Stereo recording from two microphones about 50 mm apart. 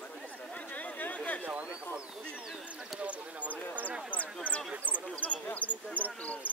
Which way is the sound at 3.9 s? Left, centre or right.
Left.